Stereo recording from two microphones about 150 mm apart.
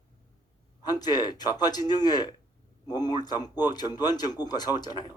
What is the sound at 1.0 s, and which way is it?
Speech, 25° left (ahead or behind).